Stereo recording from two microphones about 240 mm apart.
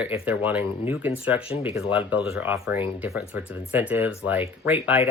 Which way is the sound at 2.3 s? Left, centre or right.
Centre.